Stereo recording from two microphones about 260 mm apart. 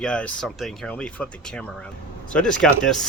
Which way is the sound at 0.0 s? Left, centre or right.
Centre.